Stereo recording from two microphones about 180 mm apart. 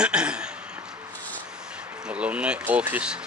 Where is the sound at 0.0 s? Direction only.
5° right (ahead or behind).